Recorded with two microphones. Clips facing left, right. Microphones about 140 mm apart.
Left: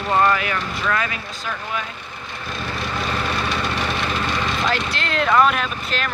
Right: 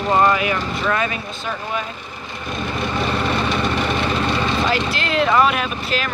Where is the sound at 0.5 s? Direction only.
30° right (ahead or behind).